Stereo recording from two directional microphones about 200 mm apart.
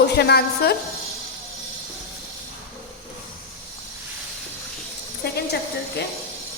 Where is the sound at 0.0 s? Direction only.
55° left (ahead or behind).